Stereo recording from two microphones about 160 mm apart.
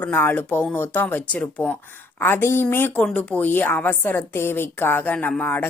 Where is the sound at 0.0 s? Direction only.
10° left (ahead or behind).